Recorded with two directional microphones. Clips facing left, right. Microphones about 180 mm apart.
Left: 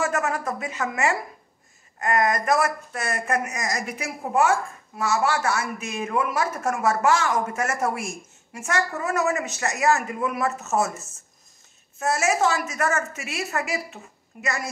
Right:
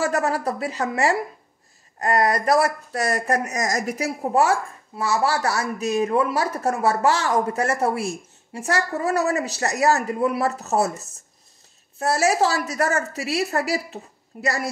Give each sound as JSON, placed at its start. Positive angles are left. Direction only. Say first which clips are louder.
{"t": 0.0, "sound": "speech", "louder": "right 3 dB", "side_deg": -35}